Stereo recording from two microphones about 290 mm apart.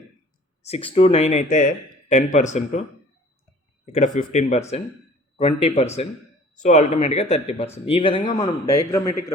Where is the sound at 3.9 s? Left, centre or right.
Left.